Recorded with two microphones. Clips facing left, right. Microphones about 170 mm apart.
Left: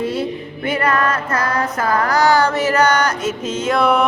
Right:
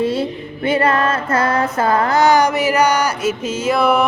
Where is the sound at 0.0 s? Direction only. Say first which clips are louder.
Right 2 dB; 30° right (ahead or behind).